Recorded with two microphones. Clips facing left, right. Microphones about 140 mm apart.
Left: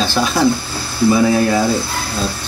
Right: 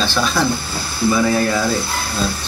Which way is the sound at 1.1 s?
10° left (ahead or behind).